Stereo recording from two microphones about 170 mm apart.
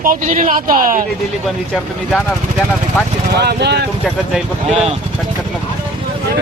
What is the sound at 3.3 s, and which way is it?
Speech, 80° right.